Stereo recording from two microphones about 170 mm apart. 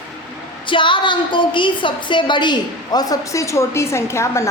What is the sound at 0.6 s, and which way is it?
A woman's voice, 30° left (ahead or behind).